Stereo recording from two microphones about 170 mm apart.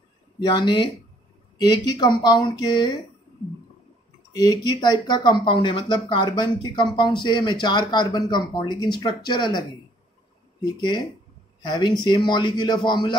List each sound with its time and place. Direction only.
0.4 s speech: 25° left (ahead or behind)
4.3 s speech: 25° left (ahead or behind)